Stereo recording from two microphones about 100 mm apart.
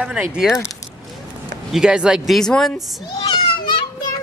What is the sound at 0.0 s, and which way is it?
Speech, 10° right (ahead or behind).